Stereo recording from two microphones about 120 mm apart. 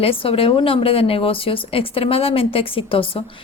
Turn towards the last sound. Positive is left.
turn(degrees=50)  # may be behind; listen again after turning